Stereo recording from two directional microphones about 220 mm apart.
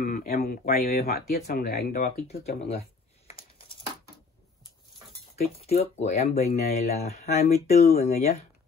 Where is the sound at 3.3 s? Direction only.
25° left (ahead or behind).